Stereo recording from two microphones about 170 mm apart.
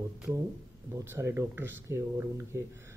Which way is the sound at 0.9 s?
15° right (ahead or behind).